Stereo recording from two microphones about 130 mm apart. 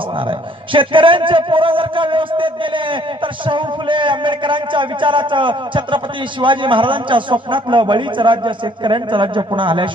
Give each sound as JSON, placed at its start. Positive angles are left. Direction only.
{"t": 0.7, "sound": "a man's voice", "side_deg": -40}